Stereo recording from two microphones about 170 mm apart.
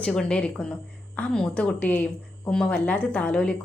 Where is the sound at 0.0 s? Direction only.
5° left (ahead or behind).